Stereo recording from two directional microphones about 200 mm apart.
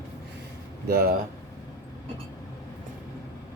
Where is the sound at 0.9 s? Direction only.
50° right (ahead or behind).